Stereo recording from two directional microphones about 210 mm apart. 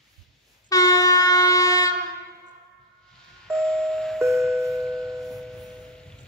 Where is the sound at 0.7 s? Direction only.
15° left (ahead or behind).